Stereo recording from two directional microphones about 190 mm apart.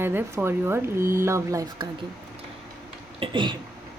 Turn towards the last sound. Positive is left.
turn(degrees=-25)  # may be behind; listen again after turning